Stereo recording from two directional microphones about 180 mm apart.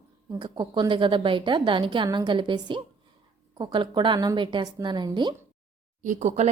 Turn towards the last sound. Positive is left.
turn(degrees=-40)  # may be behind; listen again after turning